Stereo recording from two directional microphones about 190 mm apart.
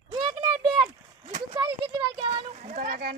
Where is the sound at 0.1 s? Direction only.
20° right (ahead or behind).